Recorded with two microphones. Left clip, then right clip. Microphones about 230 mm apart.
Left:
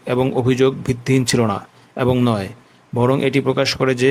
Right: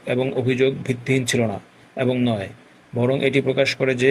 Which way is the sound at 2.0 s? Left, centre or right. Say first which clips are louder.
Left 4 dB; left.